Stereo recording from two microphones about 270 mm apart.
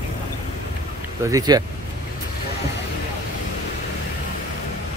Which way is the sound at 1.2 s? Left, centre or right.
Centre.